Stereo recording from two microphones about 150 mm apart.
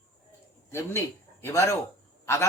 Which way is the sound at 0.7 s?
15° left (ahead or behind).